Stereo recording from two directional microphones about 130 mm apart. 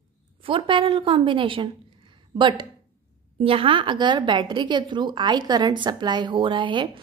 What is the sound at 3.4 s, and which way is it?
A woman's voice, 45° right (ahead or behind).